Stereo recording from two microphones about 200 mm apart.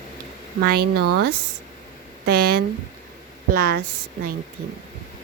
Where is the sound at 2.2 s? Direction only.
50° right (ahead or behind).